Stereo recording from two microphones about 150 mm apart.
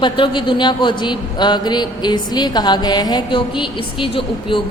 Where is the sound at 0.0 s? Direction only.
35° left (ahead or behind).